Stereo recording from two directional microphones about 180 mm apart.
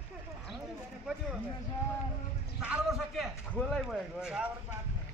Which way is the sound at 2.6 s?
5° right (ahead or behind).